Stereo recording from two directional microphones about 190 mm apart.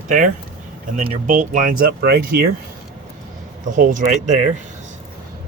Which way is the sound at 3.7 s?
40° right (ahead or behind).